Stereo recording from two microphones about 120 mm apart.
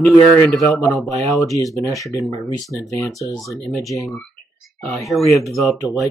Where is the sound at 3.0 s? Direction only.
25° left (ahead or behind).